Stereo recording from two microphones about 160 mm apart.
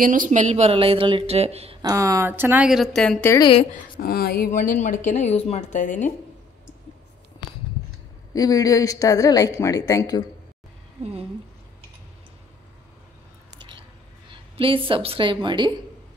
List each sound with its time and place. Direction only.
0.0 s speech: 60° right (ahead or behind); by 1.8 s 40° right (ahead or behind)
1.8 s a woman's voice: 20° right (ahead or behind); by 3.3 s 5° left (ahead or behind)
3.9 s speech: 65° left (ahead or behind)
4.5 s a woman's voice: 50° left (ahead or behind)
8.3 s a woman's voice: 20° left (ahead or behind)
11.0 s a woman's voice: 40° right (ahead or behind)
14.6 s speech: 35° right (ahead or behind)